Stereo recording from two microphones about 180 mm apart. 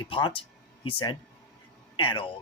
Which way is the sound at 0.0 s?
25° left (ahead or behind).